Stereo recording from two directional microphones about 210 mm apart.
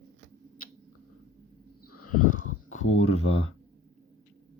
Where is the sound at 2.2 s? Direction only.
40° left (ahead or behind).